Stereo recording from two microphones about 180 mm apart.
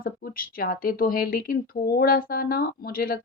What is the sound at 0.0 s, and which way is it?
Speech, 55° left (ahead or behind).